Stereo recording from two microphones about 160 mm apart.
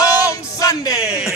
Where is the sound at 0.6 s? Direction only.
20° left (ahead or behind).